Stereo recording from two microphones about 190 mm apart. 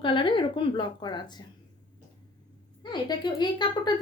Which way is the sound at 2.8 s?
20° left (ahead or behind).